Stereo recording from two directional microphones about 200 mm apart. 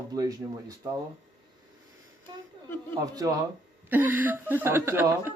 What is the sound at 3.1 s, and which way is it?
Speech, 15° right (ahead or behind).